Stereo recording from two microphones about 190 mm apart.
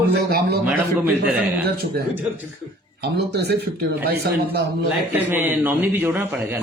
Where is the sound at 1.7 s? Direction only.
55° right (ahead or behind).